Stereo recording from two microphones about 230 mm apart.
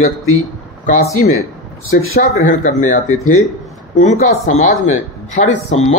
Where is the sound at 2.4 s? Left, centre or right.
Left.